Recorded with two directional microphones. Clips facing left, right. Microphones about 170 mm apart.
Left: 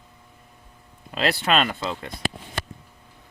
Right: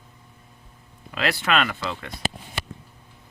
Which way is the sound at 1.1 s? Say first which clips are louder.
Left 2 dB; 30° left (ahead or behind).